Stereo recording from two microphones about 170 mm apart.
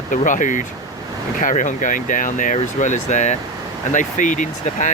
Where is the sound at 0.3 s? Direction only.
50° left (ahead or behind).